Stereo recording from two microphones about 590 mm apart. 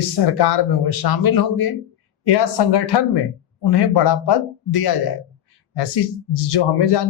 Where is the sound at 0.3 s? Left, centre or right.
Left.